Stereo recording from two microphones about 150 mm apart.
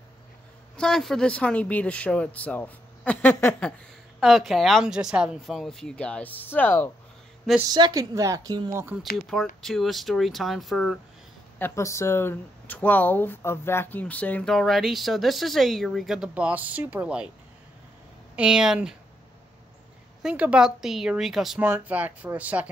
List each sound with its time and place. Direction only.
0.7 s speech: 5° left (ahead or behind)
4.2 s speech: centre (ahead or behind)
7.7 s a woman's voice: 25° right (ahead or behind)
9.1 s speech: centre (ahead or behind)
11.5 s speech: 15° left (ahead or behind); by 17.3 s 5° right (ahead or behind)
18.3 s speech: 5° right (ahead or behind)
20.2 s speech: 5° right (ahead or behind)